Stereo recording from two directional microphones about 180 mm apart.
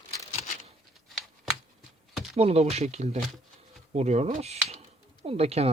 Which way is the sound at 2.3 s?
35° right (ahead or behind).